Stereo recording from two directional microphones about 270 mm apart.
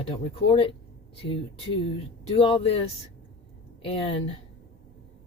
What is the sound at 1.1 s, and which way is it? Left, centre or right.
Speech, left.